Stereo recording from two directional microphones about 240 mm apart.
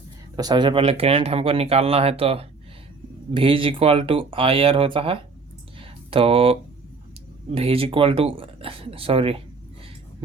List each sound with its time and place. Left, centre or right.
0.3 s speech: centre
5.8 s a sound: right
7.5 s speech: right